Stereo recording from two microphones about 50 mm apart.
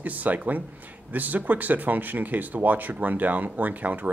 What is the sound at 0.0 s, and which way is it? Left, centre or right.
Speech, right.